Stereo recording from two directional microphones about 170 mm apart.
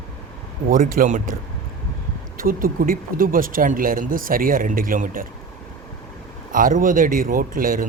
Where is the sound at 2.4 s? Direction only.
55° right (ahead or behind).